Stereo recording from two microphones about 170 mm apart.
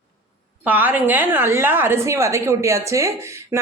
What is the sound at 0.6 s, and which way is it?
A woman's voice, 10° right (ahead or behind).